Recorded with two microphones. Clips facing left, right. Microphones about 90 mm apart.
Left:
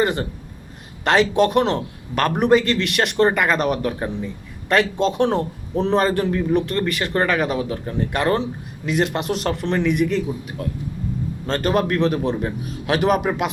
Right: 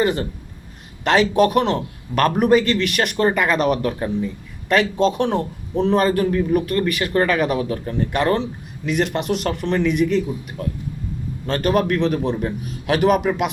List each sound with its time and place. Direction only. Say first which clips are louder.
1.0 s a man's voice: right 1 dB; 30° left (ahead or behind)
5.3 s a man's voice: even; 35° left (ahead or behind)
11.4 s a man's voice: right 1 dB; 30° left (ahead or behind)